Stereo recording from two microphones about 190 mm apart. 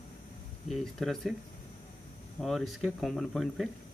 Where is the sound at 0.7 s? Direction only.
Centre (ahead or behind).